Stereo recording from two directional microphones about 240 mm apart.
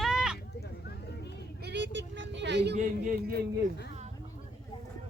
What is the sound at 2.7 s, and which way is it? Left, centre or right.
Speech, right.